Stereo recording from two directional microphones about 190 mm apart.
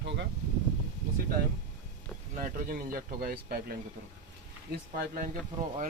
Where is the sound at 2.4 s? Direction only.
50° right (ahead or behind).